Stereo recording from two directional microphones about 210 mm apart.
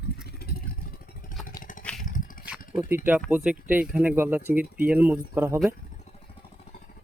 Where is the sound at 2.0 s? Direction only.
40° left (ahead or behind).